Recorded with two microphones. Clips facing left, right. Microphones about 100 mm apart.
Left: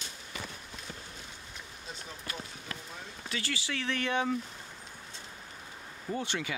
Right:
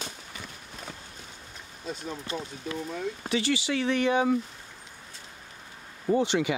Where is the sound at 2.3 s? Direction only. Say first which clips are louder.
Right 7 dB; 25° right (ahead or behind); by 4.3 s 10° right (ahead or behind).